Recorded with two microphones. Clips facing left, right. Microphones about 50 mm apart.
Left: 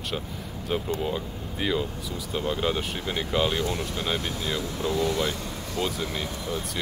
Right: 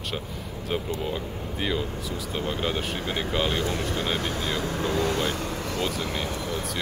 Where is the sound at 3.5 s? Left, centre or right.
Right.